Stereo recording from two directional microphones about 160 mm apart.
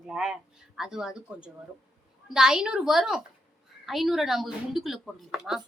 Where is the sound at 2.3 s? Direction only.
5° right (ahead or behind).